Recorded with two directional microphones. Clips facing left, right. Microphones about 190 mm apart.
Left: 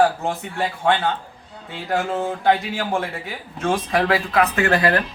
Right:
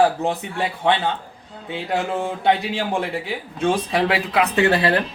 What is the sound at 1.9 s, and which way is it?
Speech, 20° right (ahead or behind).